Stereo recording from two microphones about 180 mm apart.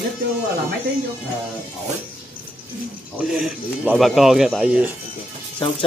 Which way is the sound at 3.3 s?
5° right (ahead or behind).